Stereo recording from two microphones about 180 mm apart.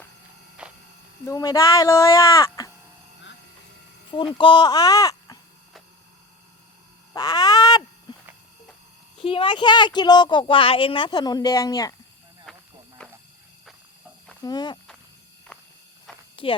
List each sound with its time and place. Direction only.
0.6 s electric shaver: 5° right (ahead or behind)
1.3 s speech: 20° left (ahead or behind)
4.4 s speech: 25° left (ahead or behind)
7.1 s a sound: 20° left (ahead or behind)
9.2 s speech: 30° left (ahead or behind)
12.5 s hiss: 5° left (ahead or behind)
13.0 s a sound: 5° left (ahead or behind)
14.4 s speech: 25° left (ahead or behind)
15.5 s walk: 5° left (ahead or behind)
16.3 s a sound: 30° left (ahead or behind)